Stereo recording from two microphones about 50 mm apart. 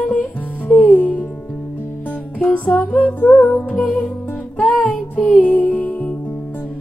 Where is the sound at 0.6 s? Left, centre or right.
Left.